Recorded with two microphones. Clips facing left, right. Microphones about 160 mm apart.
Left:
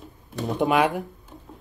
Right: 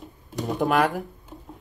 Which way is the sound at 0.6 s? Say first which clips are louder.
Left 1 dB; centre (ahead or behind).